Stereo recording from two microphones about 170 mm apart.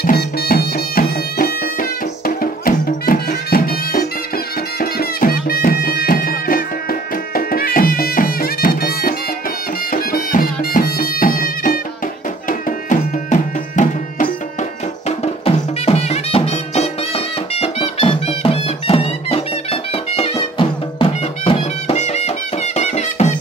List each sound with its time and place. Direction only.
0.0 s bagpipes: 60° left (ahead or behind)
4.7 s music: 60° left (ahead or behind)
15.0 s music: 35° left (ahead or behind)